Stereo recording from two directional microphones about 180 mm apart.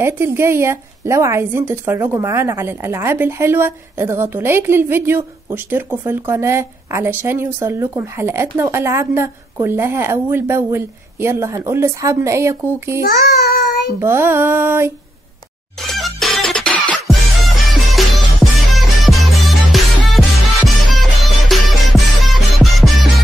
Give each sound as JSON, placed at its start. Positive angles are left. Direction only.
{"t": 0.0, "sound": "a woman's voice", "side_deg": -15}
{"t": 13.0, "sound": "child singing", "side_deg": 60}
{"t": 13.9, "sound": "a woman's voice", "side_deg": -15}
{"t": 15.9, "sound": "music", "side_deg": 0}